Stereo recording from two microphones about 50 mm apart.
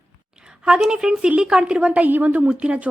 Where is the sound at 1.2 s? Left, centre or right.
Right.